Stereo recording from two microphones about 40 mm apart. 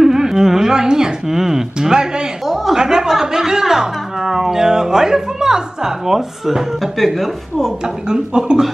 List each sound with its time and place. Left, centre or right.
0.0 s a sound: centre
2.4 s speech: centre
7.8 s speech: centre